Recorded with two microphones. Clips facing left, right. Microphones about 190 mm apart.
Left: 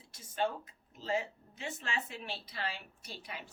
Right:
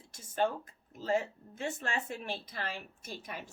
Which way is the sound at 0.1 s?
45° right (ahead or behind).